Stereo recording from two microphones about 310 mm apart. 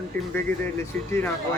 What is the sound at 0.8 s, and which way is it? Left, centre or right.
Speech, centre.